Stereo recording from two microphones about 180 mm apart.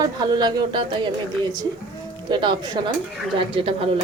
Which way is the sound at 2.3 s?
25° right (ahead or behind).